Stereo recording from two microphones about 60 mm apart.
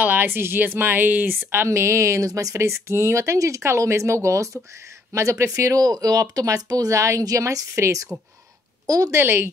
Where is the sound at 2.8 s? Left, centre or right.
Right.